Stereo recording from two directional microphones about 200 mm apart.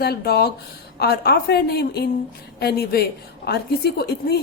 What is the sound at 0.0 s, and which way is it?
A woman's voice, 50° left (ahead or behind).